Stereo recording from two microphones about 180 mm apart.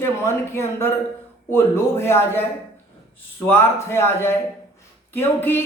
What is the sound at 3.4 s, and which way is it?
Speech, 15° left (ahead or behind).